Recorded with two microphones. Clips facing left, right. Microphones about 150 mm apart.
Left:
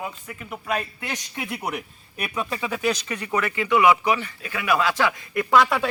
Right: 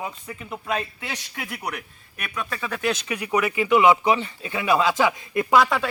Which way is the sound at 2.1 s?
30° left (ahead or behind).